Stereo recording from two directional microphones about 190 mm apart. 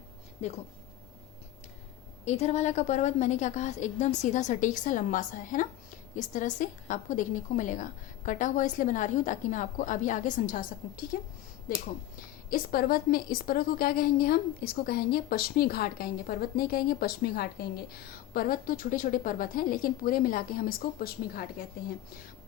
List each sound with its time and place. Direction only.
2.2 s a woman's voice: 35° left (ahead or behind)